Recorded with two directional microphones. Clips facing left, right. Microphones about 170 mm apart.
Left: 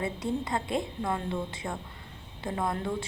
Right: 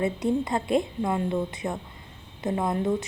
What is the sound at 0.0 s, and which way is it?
Speech, 25° right (ahead or behind).